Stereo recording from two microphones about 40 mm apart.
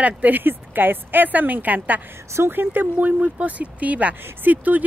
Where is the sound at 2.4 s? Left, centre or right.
Right.